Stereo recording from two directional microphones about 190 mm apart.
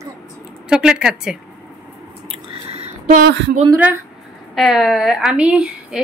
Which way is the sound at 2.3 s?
35° right (ahead or behind).